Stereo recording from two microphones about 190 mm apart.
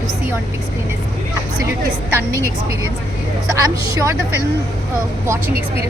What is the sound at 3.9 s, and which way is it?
Speech, 15° right (ahead or behind).